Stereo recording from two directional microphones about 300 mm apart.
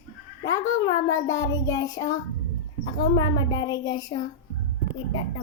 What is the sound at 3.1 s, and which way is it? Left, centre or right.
A child's voice, centre.